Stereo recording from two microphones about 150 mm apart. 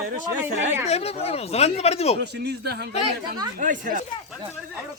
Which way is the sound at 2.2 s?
90° right.